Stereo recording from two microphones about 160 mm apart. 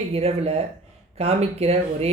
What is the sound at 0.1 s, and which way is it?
Speech, 40° right (ahead or behind).